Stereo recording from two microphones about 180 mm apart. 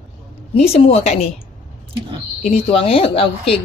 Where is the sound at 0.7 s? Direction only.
35° left (ahead or behind).